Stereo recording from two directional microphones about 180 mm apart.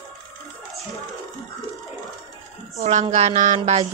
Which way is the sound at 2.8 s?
40° right (ahead or behind).